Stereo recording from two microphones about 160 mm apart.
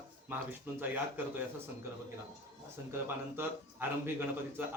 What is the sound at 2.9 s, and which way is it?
Speech, 15° right (ahead or behind).